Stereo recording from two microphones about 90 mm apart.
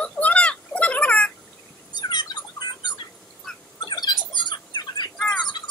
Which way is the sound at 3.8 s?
50° left (ahead or behind).